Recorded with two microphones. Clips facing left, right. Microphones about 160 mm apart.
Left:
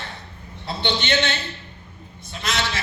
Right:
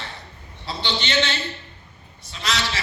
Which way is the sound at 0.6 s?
55° left (ahead or behind).